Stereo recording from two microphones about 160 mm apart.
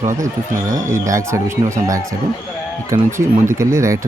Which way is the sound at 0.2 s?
20° right (ahead or behind).